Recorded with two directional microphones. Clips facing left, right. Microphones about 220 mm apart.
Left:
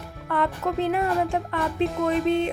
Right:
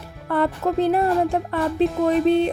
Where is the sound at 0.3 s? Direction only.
35° right (ahead or behind).